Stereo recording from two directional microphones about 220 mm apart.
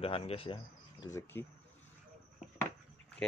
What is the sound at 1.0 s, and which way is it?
Speech, 10° left (ahead or behind).